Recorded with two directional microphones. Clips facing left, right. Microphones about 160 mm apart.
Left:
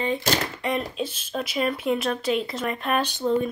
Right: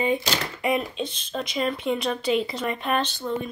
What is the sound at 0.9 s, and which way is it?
Speech, 5° left (ahead or behind).